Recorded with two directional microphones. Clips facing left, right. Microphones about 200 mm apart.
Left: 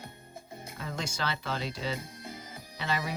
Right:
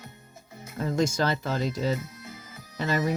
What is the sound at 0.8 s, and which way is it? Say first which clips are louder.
Speech: right 11 dB; 45° right (ahead or behind).